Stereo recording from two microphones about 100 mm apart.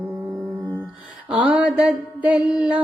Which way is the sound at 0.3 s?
35° right (ahead or behind).